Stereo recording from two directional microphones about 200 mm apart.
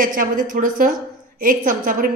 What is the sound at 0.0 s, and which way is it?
A woman's voice, 45° right (ahead or behind).